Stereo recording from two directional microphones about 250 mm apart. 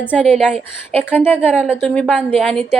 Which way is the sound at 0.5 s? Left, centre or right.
Right.